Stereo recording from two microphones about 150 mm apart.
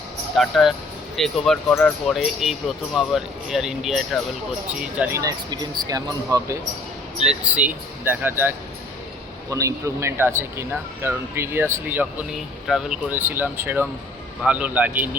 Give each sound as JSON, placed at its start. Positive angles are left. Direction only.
{"t": 0.3, "sound": "speech", "side_deg": 0}
{"t": 5.5, "sound": "speech", "side_deg": -25}
{"t": 7.2, "sound": "speech", "side_deg": -5}